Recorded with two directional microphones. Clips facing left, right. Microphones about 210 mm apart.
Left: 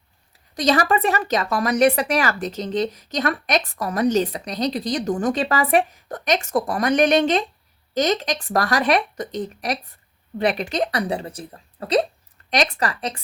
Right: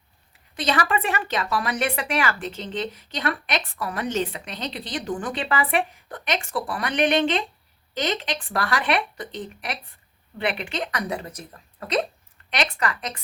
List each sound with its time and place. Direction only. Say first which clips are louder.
0.5 s speech: left 5 dB; 40° left (ahead or behind)